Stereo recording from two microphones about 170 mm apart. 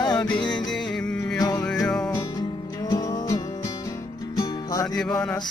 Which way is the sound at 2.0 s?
20° left (ahead or behind).